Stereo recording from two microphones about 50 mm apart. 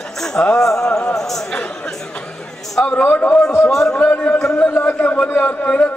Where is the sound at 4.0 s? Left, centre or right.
Left.